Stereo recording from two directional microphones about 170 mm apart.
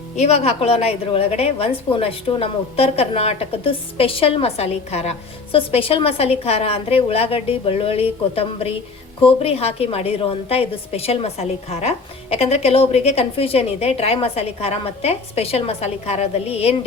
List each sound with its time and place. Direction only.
0.2 s a woman's voice: 40° left (ahead or behind)